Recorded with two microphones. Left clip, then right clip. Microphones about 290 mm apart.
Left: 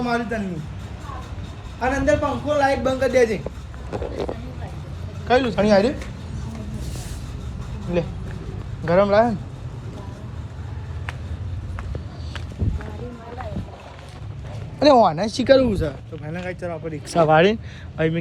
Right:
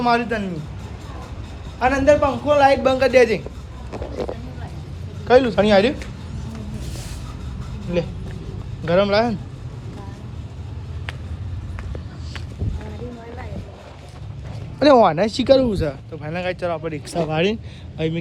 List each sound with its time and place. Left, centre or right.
0.0 s speech: centre
1.8 s speech: centre
5.3 s speech: centre
8.8 s speech: centre
14.8 s speech: right
15.4 s speech: centre